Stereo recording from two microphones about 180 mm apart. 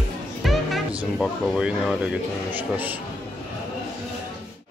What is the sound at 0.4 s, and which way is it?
Speech, centre (ahead or behind).